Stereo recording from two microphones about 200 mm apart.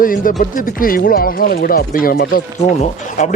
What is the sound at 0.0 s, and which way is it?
Speech, 45° left (ahead or behind).